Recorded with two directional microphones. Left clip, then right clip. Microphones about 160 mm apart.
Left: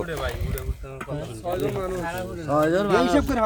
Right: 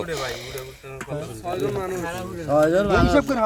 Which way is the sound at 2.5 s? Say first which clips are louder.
Right 2 dB; 5° right (ahead or behind).